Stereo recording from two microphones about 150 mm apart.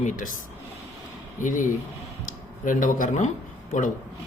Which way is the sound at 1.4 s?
60° left (ahead or behind).